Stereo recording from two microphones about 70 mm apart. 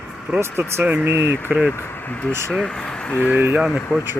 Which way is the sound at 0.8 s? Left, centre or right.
Right.